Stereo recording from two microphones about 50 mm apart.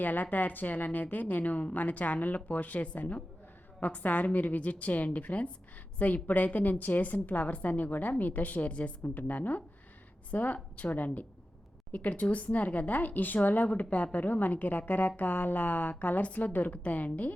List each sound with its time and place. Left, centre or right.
0.0 s speech: left